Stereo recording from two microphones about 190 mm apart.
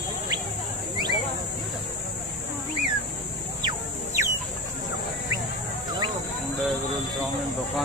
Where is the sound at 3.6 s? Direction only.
20° right (ahead or behind).